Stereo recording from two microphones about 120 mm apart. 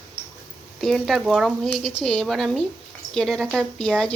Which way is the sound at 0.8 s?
Centre (ahead or behind).